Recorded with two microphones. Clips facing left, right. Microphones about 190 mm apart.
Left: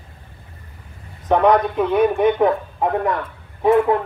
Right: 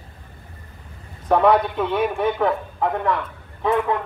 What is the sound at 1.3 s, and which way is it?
Speech, 5° right (ahead or behind).